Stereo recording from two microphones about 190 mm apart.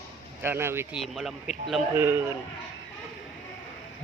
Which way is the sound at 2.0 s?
10° right (ahead or behind).